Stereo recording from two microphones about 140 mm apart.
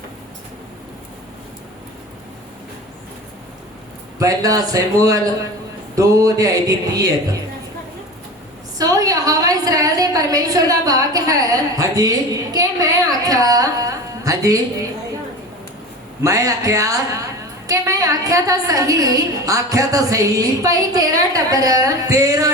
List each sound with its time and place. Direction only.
4.2 s a woman's voice: 25° right (ahead or behind)
8.8 s a sound: 25° right (ahead or behind)
16.2 s a woman's voice: 25° right (ahead or behind)